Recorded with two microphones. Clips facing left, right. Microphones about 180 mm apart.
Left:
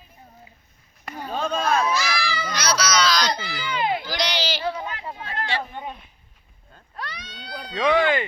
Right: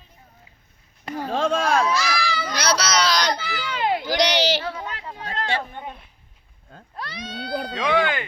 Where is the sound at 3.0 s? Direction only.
65° right (ahead or behind).